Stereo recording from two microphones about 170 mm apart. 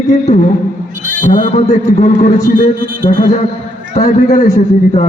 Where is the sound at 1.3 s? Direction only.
45° left (ahead or behind).